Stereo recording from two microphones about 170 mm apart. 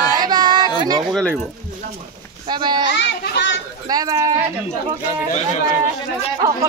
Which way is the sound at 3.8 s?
20° right (ahead or behind).